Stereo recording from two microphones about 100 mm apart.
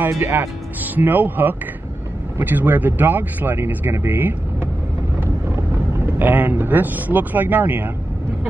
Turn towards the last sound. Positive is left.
turn(degrees=-20)  # may be behind; listen again after turning